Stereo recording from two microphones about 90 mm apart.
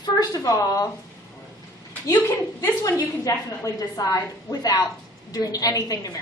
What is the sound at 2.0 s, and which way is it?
A woman's voice, 35° left (ahead or behind).